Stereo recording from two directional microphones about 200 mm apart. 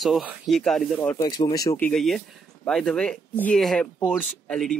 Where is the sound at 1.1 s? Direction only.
15° left (ahead or behind).